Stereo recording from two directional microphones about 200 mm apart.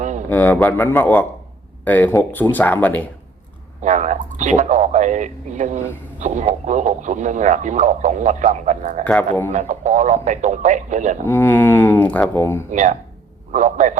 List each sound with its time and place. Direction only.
0.3 s speech: 10° left (ahead or behind)
3.8 s speech: 35° right (ahead or behind)
9.0 s speech: 10° left (ahead or behind)
9.5 s speech: 35° right (ahead or behind)
11.3 s speech: 10° left (ahead or behind)
12.7 s speech: 40° right (ahead or behind)